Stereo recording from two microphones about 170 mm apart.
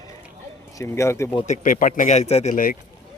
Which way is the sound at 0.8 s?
15° left (ahead or behind).